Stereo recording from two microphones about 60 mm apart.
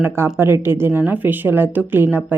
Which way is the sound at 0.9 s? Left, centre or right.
Right.